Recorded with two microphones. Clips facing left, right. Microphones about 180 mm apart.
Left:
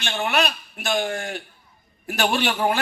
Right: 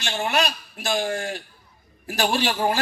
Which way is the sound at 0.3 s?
55° left (ahead or behind).